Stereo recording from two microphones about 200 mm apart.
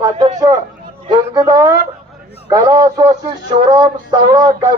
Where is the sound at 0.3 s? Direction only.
15° right (ahead or behind).